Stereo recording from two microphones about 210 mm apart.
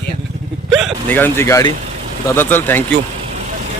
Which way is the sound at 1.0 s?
10° left (ahead or behind).